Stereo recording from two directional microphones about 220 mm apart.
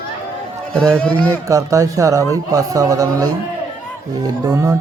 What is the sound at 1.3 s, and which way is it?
Speech, 15° right (ahead or behind).